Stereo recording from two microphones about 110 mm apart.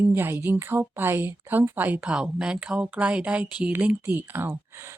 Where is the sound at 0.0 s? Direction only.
20° right (ahead or behind).